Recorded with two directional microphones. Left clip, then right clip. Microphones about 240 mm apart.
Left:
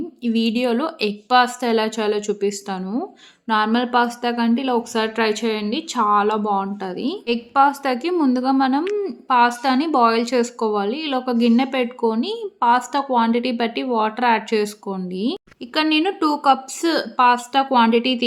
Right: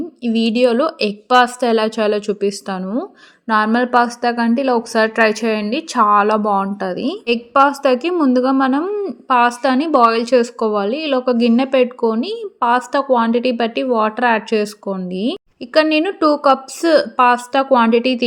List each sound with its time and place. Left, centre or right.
0.2 s a woman's voice: centre